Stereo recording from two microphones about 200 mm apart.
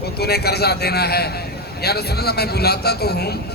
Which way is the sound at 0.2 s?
55° left (ahead or behind).